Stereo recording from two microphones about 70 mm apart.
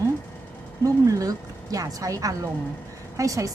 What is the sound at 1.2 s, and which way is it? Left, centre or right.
A woman's voice, right.